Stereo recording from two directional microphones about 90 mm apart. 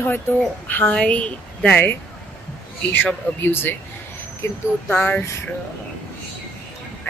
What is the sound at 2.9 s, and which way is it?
Speech, 20° left (ahead or behind).